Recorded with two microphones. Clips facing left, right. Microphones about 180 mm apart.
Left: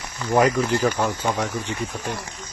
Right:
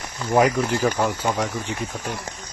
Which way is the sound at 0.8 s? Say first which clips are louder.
Even; 10° right (ahead or behind).